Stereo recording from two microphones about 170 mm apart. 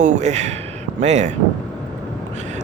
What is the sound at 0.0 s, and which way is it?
Speech, 45° right (ahead or behind).